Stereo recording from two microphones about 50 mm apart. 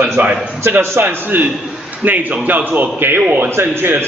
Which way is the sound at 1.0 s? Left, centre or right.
Right.